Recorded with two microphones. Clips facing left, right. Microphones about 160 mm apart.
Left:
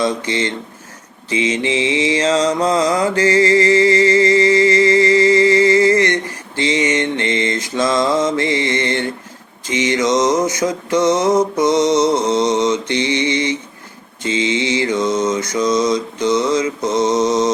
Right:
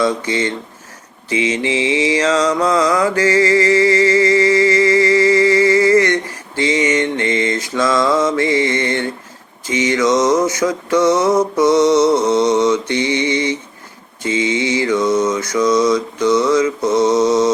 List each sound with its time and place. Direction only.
0.0 s speech: 20° left (ahead or behind)
1.6 s mantra: 20° left (ahead or behind)